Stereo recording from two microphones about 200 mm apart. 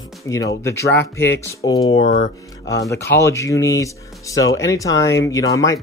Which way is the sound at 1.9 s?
35° left (ahead or behind).